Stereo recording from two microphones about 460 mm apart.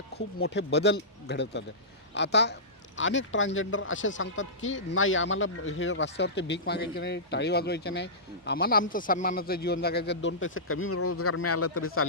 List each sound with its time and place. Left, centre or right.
0.1 s speech: left